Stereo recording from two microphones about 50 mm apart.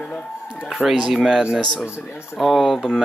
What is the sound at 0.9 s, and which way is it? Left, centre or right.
Speech, centre.